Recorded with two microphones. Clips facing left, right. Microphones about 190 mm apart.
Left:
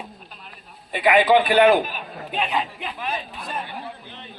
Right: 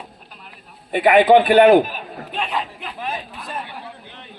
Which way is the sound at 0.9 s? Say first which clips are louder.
Right 4 dB; 50° right (ahead or behind).